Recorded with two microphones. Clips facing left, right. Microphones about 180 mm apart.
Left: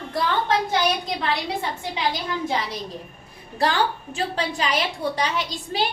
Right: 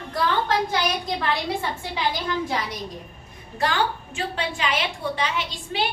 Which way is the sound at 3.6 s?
35° left (ahead or behind).